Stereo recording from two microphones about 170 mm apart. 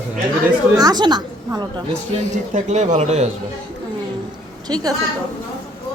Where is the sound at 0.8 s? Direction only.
25° right (ahead or behind).